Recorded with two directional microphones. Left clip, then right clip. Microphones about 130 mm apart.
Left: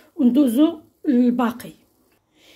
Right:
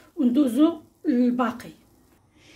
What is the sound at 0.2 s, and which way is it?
A woman's voice, 35° left (ahead or behind).